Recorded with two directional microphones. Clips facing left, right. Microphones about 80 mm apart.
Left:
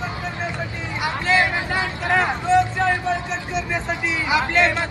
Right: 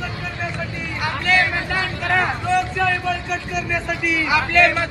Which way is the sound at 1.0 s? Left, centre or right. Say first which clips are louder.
Even; left.